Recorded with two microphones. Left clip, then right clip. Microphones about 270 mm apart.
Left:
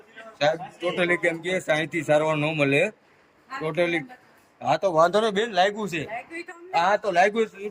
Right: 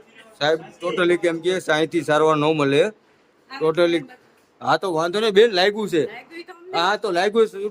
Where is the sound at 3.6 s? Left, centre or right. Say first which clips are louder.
Right 7 dB; centre.